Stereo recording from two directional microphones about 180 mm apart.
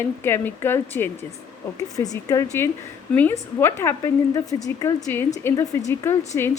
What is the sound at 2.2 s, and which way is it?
A woman's voice, 15° left (ahead or behind).